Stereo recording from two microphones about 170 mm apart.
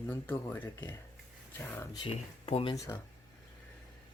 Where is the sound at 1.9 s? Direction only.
30° left (ahead or behind).